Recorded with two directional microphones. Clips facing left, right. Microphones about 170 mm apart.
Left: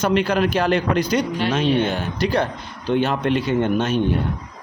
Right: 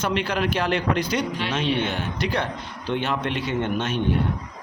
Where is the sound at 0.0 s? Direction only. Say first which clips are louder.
Left 5 dB; 40° left (ahead or behind).